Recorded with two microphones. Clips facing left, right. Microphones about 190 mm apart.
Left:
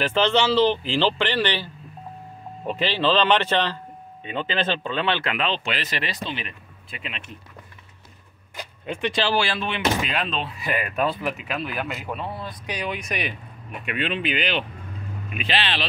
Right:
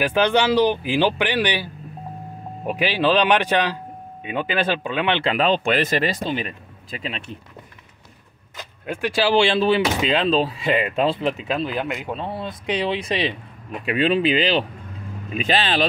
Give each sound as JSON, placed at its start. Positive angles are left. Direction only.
{"t": 0.0, "sound": "a man's voice", "side_deg": -15}
{"t": 5.2, "sound": "speech", "side_deg": -40}
{"t": 8.8, "sound": "speech", "side_deg": -5}
{"t": 9.3, "sound": "speech", "side_deg": -25}